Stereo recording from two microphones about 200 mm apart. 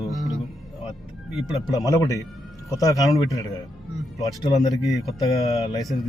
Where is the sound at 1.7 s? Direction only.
15° left (ahead or behind).